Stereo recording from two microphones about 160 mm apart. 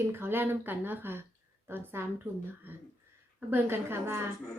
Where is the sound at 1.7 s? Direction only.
15° right (ahead or behind).